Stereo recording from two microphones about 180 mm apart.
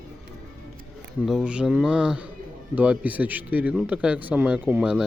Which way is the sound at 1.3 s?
5° right (ahead or behind).